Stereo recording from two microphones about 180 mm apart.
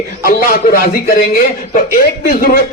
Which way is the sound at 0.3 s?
55° left (ahead or behind).